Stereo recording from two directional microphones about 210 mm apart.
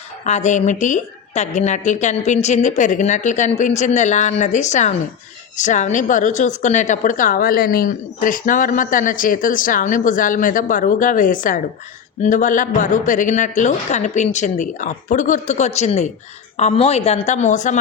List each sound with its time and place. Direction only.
0.3 s a woman's voice: 35° left (ahead or behind)